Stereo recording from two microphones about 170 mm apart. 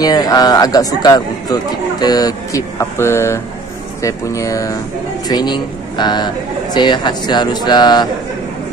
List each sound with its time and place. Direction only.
0.0 s speech: 20° left (ahead or behind)